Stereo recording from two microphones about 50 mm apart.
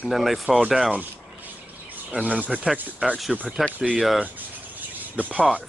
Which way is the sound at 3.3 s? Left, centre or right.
Centre.